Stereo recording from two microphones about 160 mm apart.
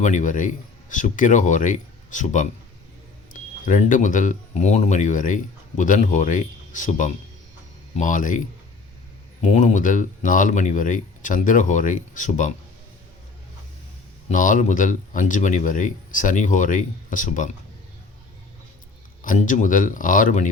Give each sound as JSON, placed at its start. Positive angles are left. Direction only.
{"t": 0.0, "sound": "speech", "side_deg": 50}
{"t": 9.4, "sound": "speech", "side_deg": 50}
{"t": 14.3, "sound": "speech", "side_deg": 55}
{"t": 19.2, "sound": "speech", "side_deg": 55}